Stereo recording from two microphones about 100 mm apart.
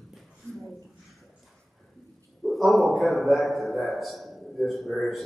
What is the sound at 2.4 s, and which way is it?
A man's voice, centre (ahead or behind).